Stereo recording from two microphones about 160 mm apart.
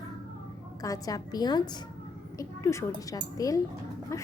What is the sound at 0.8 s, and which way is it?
A woman's voice, 20° left (ahead or behind).